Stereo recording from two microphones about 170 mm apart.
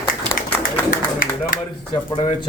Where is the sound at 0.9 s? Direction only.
55° left (ahead or behind).